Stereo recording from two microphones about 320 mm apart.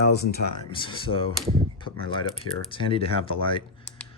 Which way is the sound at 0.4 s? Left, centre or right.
Left.